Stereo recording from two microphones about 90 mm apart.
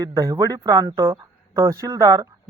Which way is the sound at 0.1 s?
40° right (ahead or behind).